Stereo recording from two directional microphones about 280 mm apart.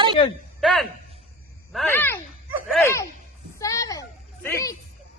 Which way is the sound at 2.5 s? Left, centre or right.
Centre.